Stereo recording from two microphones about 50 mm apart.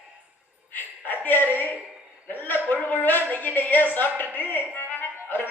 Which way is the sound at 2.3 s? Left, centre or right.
Left.